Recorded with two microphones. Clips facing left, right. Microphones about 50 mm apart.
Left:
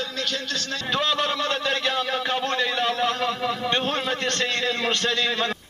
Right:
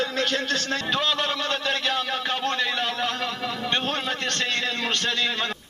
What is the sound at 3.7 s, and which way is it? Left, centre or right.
A man's voice, right.